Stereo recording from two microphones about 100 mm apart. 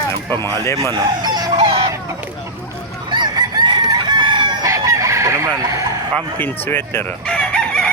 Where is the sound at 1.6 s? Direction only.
65° right (ahead or behind).